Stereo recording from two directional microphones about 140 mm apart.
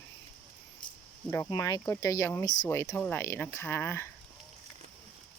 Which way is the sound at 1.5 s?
25° left (ahead or behind).